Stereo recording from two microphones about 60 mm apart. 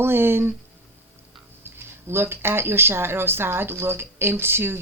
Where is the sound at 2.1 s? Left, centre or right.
Right.